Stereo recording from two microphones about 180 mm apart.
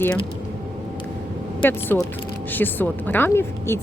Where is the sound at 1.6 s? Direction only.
10° left (ahead or behind).